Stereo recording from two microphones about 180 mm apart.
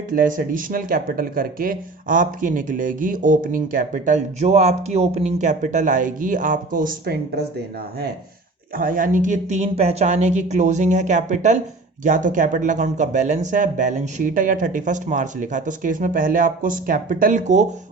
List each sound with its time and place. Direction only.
0.1 s speech: 50° right (ahead or behind)
8.7 s speech: 50° right (ahead or behind)